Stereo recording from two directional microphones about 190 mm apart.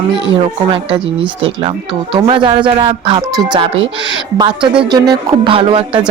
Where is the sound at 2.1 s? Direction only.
25° right (ahead or behind).